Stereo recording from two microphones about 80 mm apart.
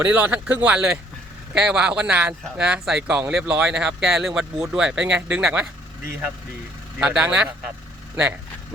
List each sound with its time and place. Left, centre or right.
0.0 s speech: right
7.0 s speech: centre